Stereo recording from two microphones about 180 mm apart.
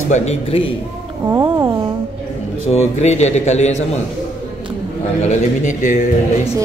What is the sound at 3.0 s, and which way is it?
Speech, 40° left (ahead or behind).